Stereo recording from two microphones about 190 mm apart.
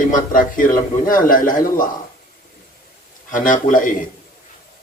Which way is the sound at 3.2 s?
45° left (ahead or behind).